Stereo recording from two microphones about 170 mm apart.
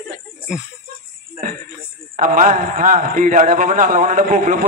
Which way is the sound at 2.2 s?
50° right (ahead or behind).